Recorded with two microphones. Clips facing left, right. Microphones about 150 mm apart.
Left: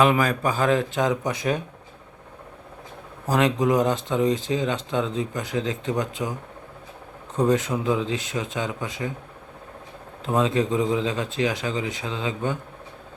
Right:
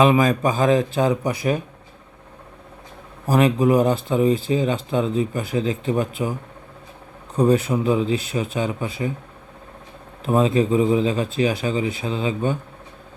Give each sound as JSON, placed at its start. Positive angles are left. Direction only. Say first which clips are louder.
{"t": 0.0, "sound": "speech", "louder": "right 4 dB", "side_deg": -20}
{"t": 3.2, "sound": "speech", "louder": "right 4 dB", "side_deg": -10}
{"t": 7.3, "sound": "speech", "louder": "right 4 dB", "side_deg": -15}
{"t": 10.2, "sound": "speech", "louder": "right 4 dB", "side_deg": -15}